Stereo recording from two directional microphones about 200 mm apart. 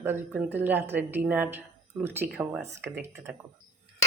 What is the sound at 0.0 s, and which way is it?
Speech, 10° right (ahead or behind).